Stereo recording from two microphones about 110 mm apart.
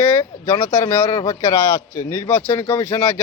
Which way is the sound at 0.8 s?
35° left (ahead or behind).